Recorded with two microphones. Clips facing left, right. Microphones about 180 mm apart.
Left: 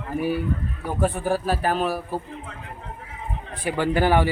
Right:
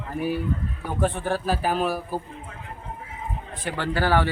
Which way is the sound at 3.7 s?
10° left (ahead or behind).